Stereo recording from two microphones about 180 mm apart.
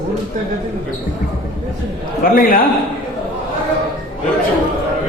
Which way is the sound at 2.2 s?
50° left (ahead or behind).